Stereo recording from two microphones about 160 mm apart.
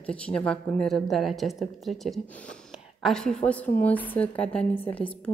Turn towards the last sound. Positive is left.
turn(degrees=10)  # may be behind; listen again after turning